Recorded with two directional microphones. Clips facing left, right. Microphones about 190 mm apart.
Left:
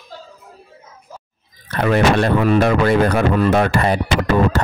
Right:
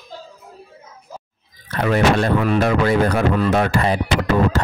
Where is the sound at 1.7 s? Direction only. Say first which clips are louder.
Left 2 dB; 60° left (ahead or behind).